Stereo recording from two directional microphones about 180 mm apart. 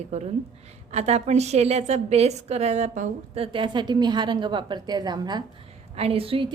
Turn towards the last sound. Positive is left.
turn(degrees=-30)  # may be behind; listen again after turning